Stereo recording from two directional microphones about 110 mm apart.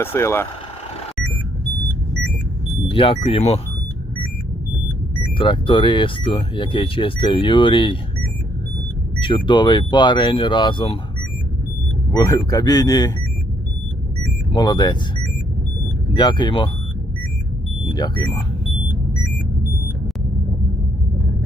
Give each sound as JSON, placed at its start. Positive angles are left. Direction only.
{"t": 0.0, "sound": "speech", "side_deg": 25}
{"t": 2.8, "sound": "speech", "side_deg": 55}
{"t": 5.4, "sound": "speech", "side_deg": 50}
{"t": 9.1, "sound": "speech", "side_deg": 45}
{"t": 12.1, "sound": "speech", "side_deg": 35}
{"t": 14.5, "sound": "speech", "side_deg": 40}
{"t": 16.1, "sound": "speech", "side_deg": 45}
{"t": 17.9, "sound": "speech", "side_deg": 40}